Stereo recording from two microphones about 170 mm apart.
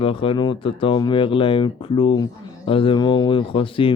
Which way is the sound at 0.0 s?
30° left (ahead or behind).